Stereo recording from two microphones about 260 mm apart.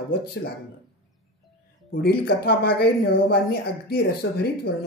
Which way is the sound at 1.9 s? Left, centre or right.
Left.